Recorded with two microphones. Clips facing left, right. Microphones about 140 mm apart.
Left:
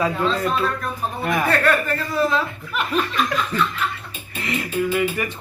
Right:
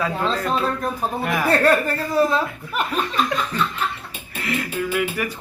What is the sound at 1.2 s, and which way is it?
Speech, 5° right (ahead or behind).